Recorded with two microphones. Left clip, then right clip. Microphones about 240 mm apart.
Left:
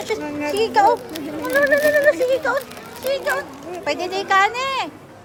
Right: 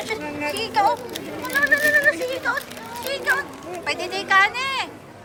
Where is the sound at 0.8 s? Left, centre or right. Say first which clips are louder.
Left 4 dB; left.